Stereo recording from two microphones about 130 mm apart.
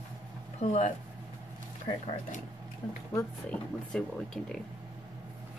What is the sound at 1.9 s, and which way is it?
Speech, 45° left (ahead or behind).